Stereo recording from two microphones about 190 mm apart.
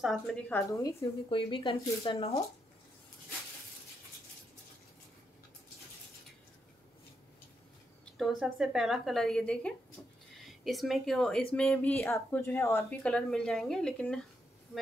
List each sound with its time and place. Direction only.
0.0 s a woman's voice: centre (ahead or behind)
1.3 s speech: 25° left (ahead or behind)
8.2 s speech: centre (ahead or behind)